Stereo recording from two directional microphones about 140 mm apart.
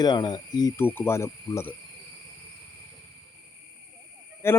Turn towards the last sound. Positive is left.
turn(degrees=20)  # may be behind; listen again after turning